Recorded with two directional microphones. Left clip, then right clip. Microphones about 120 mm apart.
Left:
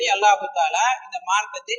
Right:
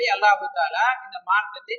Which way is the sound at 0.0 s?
20° left (ahead or behind).